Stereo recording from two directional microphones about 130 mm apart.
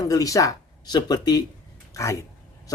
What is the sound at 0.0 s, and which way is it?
Speech, 25° left (ahead or behind).